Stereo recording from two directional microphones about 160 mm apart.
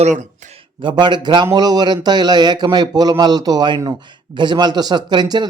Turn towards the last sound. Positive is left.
turn(degrees=-25)  # may be behind; listen again after turning